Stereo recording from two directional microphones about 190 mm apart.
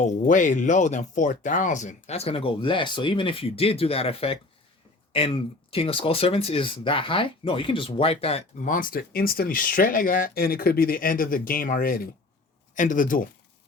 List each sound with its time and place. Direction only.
0.0 s speech: 40° left (ahead or behind)